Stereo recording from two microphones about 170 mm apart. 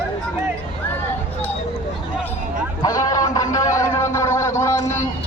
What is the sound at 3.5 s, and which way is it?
Music, 20° left (ahead or behind).